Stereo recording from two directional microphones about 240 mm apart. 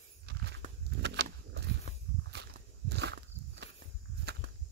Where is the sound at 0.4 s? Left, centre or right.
Right.